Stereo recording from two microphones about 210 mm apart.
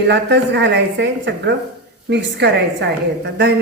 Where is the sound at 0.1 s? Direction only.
55° right (ahead or behind).